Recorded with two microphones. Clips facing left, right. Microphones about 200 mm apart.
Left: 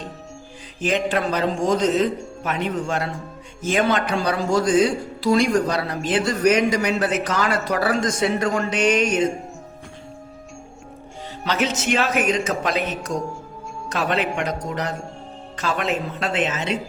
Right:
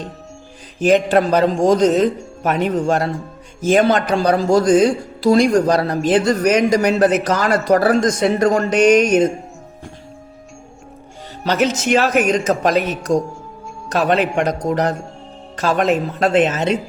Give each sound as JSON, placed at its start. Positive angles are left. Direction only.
{"t": 0.8, "sound": "speech", "side_deg": -45}
{"t": 11.4, "sound": "a woman's voice", "side_deg": -45}